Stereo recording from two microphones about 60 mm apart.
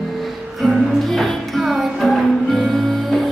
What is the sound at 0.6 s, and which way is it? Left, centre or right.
Music, centre.